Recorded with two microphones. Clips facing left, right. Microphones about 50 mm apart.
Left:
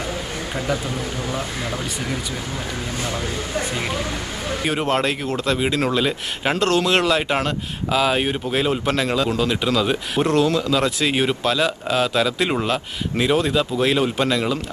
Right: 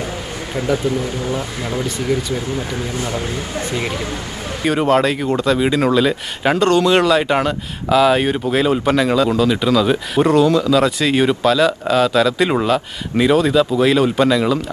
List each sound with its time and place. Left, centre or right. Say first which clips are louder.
0.7 s a man's voice: right 8 dB; right
2.6 s a man's voice: right 4 dB; right
4.6 s speech: right 7 dB; centre
5.2 s speech: right 5 dB; centre
5.5 s speech: right 5 dB; centre